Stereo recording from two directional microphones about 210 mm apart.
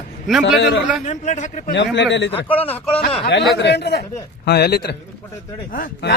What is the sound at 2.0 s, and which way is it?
Speech, 60° left (ahead or behind).